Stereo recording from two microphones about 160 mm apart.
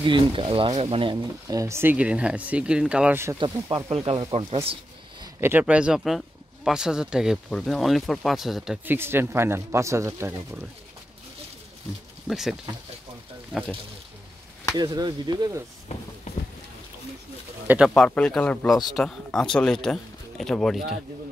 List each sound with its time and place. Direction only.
0.0 s speech: 30° right (ahead or behind)
3.9 s speech: 35° right (ahead or behind)
5.2 s speech: 15° right (ahead or behind)
8.8 s speech: 15° right (ahead or behind)
12.3 s speech: centre (ahead or behind)
14.8 s speech: 25° right (ahead or behind)
17.6 s speech: 5° right (ahead or behind)